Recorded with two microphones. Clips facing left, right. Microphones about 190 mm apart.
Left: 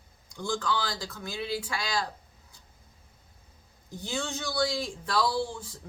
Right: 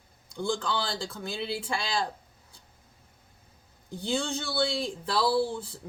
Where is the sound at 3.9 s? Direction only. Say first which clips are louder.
Right 4 dB; 30° right (ahead or behind).